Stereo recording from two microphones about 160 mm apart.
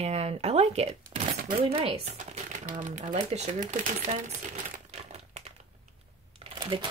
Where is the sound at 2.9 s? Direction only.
50° right (ahead or behind).